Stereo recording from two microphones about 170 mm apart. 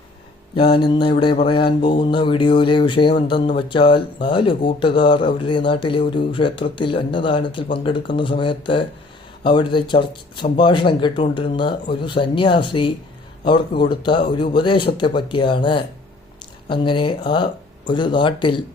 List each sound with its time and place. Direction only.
0.5 s speech: 30° left (ahead or behind)